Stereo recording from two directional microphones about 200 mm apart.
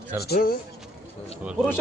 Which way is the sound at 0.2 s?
50° left (ahead or behind).